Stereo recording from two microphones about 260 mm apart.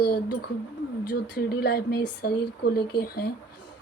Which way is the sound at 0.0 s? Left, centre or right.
Left.